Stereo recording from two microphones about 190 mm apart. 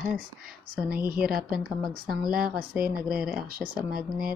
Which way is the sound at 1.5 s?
5° right (ahead or behind).